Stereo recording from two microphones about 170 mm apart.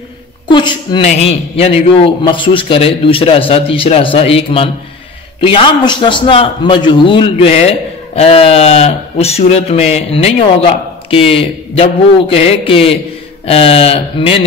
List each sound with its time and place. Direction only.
0.5 s a man's voice: 25° left (ahead or behind)